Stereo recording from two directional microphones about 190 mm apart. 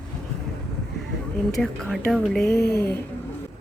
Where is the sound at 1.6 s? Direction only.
Centre (ahead or behind).